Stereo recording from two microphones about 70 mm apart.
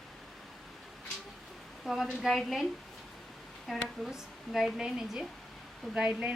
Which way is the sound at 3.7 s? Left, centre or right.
Centre.